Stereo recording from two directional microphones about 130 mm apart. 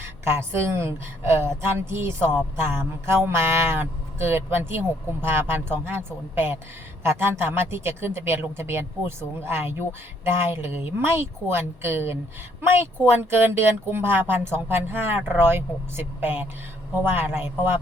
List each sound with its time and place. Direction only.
0.3 s speech: 20° right (ahead or behind)